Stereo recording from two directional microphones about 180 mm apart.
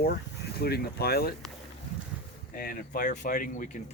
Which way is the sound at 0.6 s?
60° left (ahead or behind).